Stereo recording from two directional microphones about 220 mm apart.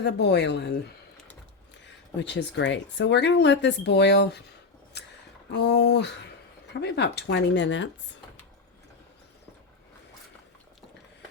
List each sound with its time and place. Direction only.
0.0 s speech: 50° left (ahead or behind)
2.1 s speech: 55° left (ahead or behind)
4.9 s a sound: 50° left (ahead or behind)
5.5 s speech: 50° left (ahead or behind)